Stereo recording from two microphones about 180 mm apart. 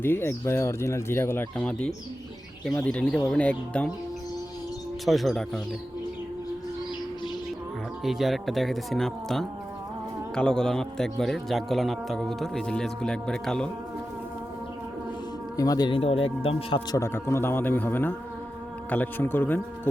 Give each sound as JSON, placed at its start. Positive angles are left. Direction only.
{"t": 0.0, "sound": "speech", "side_deg": 15}
{"t": 5.0, "sound": "speech", "side_deg": 0}
{"t": 8.0, "sound": "speech", "side_deg": 0}
{"t": 15.5, "sound": "speech", "side_deg": 20}
{"t": 17.0, "sound": "speech", "side_deg": 15}